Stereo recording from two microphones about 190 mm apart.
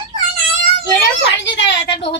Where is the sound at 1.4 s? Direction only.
70° left (ahead or behind).